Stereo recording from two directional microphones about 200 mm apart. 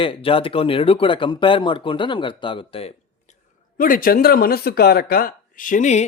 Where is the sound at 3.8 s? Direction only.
45° left (ahead or behind).